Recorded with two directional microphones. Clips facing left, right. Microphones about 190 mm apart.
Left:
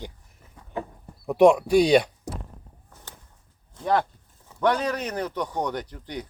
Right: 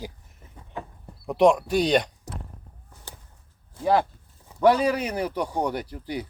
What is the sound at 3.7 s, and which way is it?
Speech, 5° right (ahead or behind).